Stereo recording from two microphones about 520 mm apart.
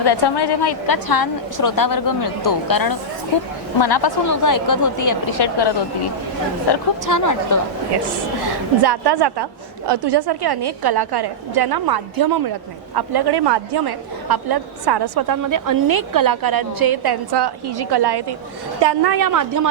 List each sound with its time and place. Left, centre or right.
0.0 s a woman's voice: left
5.4 s a woman's voice: left
6.7 s a woman's voice: left
8.8 s a woman's voice: right